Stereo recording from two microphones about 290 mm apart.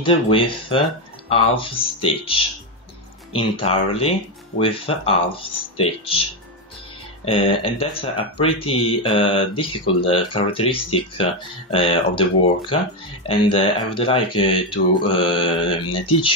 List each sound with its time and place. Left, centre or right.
0.0 s speech: centre
7.2 s speech: centre